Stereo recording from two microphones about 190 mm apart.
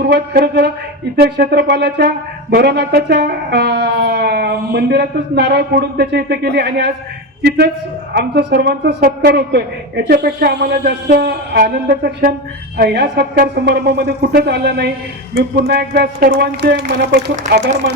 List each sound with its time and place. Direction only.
0.0 s speech: 60° right (ahead or behind); by 12.3 s 45° right (ahead or behind)
12.7 s speech: 60° right (ahead or behind)